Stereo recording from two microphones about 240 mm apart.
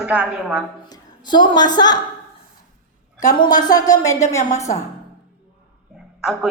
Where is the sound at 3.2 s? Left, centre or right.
Centre.